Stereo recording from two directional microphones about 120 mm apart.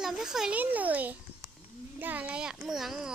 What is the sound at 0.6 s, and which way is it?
A child's voice, 15° right (ahead or behind).